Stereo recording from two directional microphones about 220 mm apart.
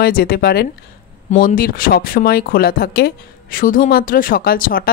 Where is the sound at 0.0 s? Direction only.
45° left (ahead or behind).